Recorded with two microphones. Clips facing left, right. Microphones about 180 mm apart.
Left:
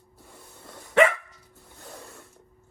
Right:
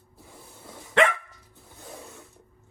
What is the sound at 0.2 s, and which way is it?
Dog, centre (ahead or behind).